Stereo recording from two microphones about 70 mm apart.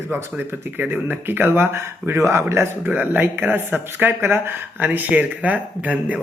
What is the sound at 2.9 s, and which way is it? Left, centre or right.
Speech, right.